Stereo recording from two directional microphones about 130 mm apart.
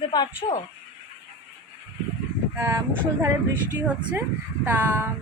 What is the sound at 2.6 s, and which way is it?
Speech, 25° right (ahead or behind).